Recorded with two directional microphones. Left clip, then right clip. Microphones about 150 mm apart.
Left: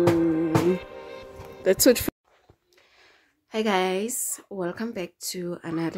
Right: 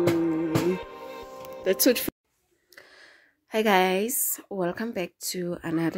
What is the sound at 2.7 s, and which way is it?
A woman's voice, 45° right (ahead or behind).